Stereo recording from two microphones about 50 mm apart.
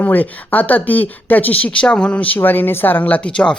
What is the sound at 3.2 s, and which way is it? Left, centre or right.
Speech, left.